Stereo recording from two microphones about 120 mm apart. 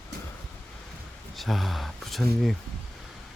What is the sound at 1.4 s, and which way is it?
Speech, centre (ahead or behind).